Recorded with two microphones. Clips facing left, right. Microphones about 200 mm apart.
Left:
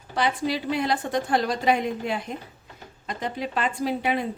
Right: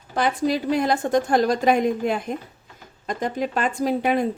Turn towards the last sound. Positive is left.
turn(degrees=-45)  # may be behind; listen again after turning